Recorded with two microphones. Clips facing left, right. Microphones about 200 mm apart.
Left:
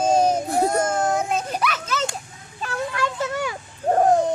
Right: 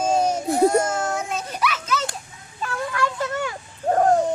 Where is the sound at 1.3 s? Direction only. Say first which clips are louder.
Left 2 dB; 50° left (ahead or behind).